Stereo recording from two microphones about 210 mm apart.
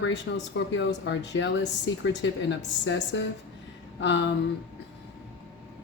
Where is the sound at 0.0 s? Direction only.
60° left (ahead or behind).